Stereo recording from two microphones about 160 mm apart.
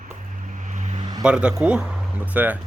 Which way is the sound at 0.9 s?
30° right (ahead or behind).